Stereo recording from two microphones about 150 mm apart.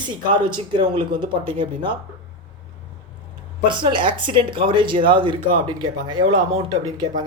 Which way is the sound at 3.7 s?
30° right (ahead or behind).